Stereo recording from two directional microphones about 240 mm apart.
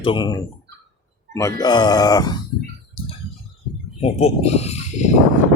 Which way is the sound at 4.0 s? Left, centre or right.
Left.